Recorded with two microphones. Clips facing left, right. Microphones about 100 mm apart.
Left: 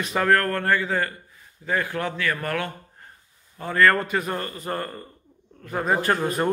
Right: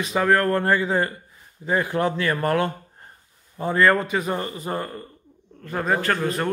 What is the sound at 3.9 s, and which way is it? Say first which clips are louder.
Speech: right 2 dB; 5° right (ahead or behind).